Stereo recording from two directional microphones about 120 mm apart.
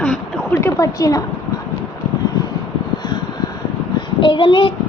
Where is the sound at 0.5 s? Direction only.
30° left (ahead or behind).